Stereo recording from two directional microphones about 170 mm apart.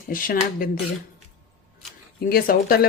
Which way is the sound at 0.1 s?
60° left (ahead or behind).